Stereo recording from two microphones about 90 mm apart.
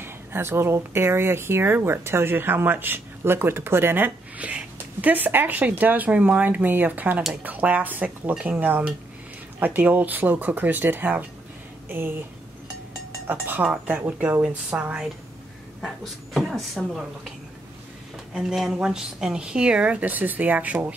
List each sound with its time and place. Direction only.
0.0 s speech: 25° right (ahead or behind)
13.3 s a woman's voice: 20° right (ahead or behind)
15.8 s a woman's voice: centre (ahead or behind)
18.3 s a woman's voice: 5° right (ahead or behind)